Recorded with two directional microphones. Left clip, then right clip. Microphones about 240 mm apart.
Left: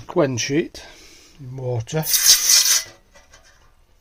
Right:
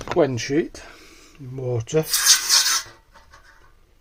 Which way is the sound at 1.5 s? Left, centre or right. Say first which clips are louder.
Right 3 dB; centre.